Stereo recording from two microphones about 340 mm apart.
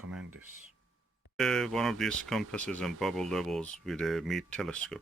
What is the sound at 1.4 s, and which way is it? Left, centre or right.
Speech, centre.